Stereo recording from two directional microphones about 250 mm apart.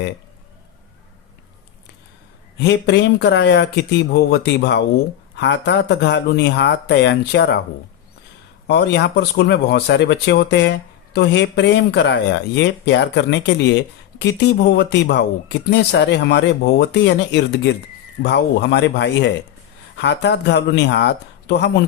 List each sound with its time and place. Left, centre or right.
2.6 s speech: left
8.6 s speech: left